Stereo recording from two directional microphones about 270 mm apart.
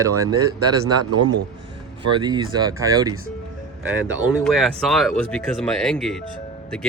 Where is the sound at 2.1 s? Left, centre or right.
Centre.